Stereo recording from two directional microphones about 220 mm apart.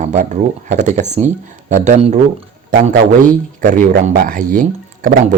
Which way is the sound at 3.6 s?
35° right (ahead or behind).